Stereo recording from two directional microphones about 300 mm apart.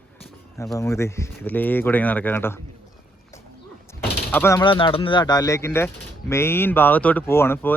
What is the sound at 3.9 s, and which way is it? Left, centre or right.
Speech, centre.